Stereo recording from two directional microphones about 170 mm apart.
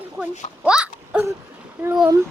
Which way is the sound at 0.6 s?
5° right (ahead or behind).